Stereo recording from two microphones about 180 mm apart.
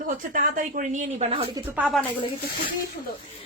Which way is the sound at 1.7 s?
5° right (ahead or behind).